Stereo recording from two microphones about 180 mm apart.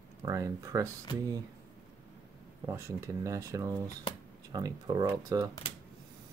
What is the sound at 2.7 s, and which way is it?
Speech, 15° right (ahead or behind).